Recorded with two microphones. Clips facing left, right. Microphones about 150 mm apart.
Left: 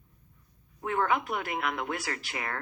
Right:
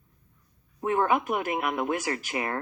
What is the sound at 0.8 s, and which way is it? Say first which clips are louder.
Speech: right 4 dB; 30° right (ahead or behind).